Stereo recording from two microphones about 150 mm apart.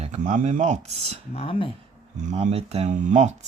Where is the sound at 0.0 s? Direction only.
50° right (ahead or behind).